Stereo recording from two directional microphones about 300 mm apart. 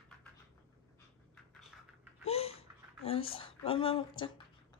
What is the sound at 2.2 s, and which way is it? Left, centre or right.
Babbling, centre.